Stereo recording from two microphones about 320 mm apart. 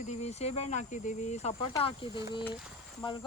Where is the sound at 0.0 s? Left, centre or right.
Left.